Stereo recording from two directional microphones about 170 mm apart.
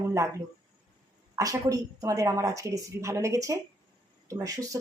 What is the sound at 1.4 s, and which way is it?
A woman's voice, 20° right (ahead or behind).